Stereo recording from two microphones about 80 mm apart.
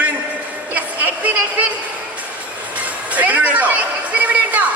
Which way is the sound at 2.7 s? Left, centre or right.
Centre.